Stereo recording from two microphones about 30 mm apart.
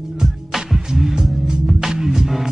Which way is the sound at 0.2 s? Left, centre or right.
Centre.